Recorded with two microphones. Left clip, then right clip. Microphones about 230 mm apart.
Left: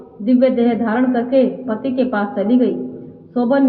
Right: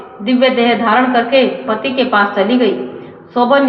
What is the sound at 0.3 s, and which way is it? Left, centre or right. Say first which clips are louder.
A woman's voice: right 4 dB; right.